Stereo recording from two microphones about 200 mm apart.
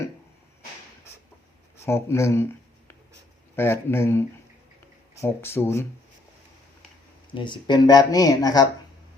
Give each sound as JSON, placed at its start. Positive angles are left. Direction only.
{"t": 1.7, "sound": "speech", "side_deg": 15}
{"t": 7.3, "sound": "speech", "side_deg": 25}